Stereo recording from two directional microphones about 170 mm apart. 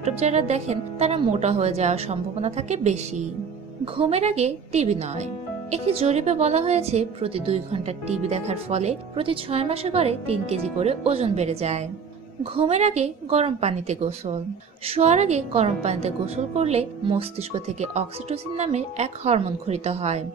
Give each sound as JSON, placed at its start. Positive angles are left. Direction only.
{"t": 0.0, "sound": "a woman's voice", "side_deg": -40}